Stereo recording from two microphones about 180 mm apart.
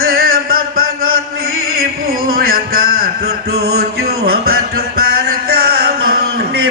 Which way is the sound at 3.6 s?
60° right (ahead or behind).